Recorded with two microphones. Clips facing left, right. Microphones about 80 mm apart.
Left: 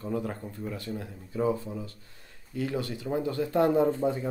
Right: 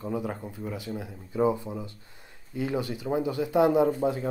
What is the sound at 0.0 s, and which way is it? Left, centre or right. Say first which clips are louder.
A man's voice: right 1 dB; centre.